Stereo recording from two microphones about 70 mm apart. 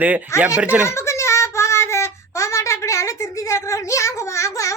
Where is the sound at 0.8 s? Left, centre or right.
Left.